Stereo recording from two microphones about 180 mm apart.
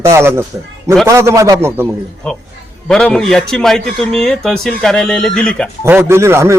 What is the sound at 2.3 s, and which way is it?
A man's voice, 5° left (ahead or behind).